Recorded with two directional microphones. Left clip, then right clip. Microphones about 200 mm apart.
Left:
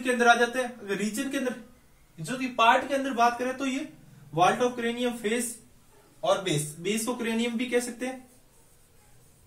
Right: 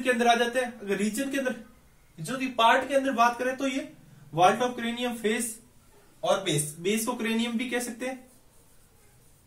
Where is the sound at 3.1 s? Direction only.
10° left (ahead or behind).